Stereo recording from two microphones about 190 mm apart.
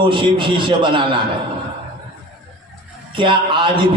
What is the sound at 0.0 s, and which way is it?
A man's voice, 25° right (ahead or behind).